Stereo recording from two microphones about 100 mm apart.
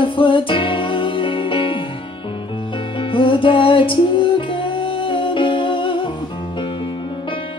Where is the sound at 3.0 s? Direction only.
60° left (ahead or behind).